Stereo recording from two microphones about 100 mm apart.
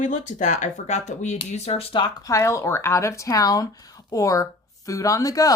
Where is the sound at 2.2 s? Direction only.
30° left (ahead or behind).